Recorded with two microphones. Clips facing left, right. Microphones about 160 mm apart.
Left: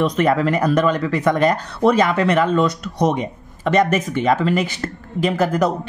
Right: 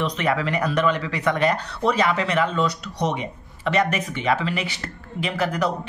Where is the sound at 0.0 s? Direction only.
45° left (ahead or behind).